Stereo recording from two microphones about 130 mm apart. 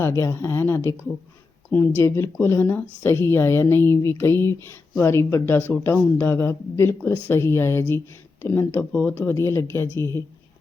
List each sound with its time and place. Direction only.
0.0 s speech: 20° left (ahead or behind)